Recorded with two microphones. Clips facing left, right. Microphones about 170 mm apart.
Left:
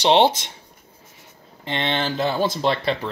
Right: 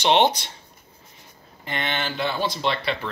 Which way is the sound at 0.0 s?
30° left (ahead or behind).